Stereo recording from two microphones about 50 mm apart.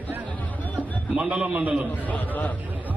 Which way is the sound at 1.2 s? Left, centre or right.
Right.